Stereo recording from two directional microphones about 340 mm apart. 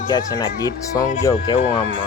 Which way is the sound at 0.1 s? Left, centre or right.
Centre.